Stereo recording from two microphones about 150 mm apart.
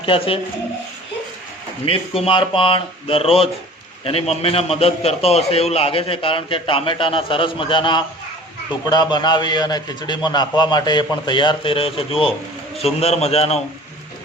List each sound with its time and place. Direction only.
0.0 s a man's voice: 35° left (ahead or behind)
1.8 s a man's voice: 40° left (ahead or behind)